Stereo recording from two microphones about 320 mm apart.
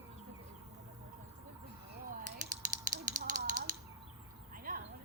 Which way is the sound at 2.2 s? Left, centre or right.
Right.